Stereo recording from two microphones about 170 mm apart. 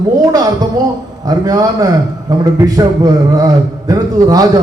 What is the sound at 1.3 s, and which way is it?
A man's voice, 20° right (ahead or behind).